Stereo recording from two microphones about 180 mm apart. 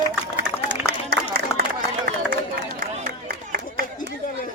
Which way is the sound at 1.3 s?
60° right (ahead or behind).